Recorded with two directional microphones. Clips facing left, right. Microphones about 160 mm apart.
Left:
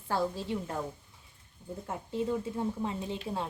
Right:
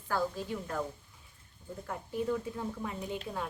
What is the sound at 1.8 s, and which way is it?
A woman's voice, 25° left (ahead or behind).